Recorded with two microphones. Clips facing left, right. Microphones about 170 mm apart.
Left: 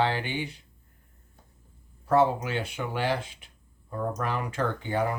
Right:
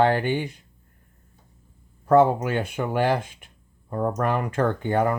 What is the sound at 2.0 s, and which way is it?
Speech, 50° right (ahead or behind).